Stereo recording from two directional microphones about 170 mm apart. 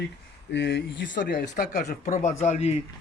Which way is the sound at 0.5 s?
90° left.